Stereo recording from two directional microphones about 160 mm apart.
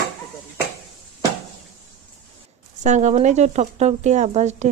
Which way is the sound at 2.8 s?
50° right (ahead or behind).